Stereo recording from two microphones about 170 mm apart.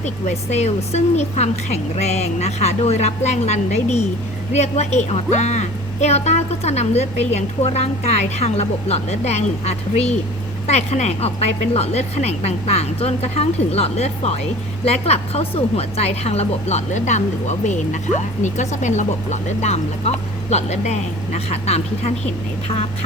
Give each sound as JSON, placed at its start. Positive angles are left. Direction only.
{"t": 0.0, "sound": "a woman's voice", "side_deg": 40}